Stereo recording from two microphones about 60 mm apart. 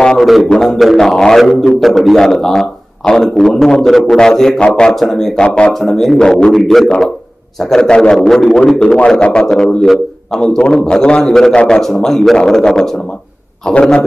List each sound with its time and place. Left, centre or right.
0.0 s music: centre
0.3 s a man's voice: centre
0.9 s a man's voice: centre
1.4 s a man's voice: centre
5.8 s a man's voice: centre
7.7 s a man's voice: centre
8.7 s a man's voice: centre